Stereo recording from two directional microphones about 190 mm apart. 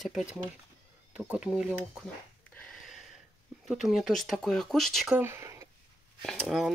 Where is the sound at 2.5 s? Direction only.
5° left (ahead or behind).